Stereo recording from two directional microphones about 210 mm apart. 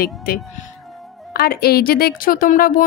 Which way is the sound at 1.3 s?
45° left (ahead or behind).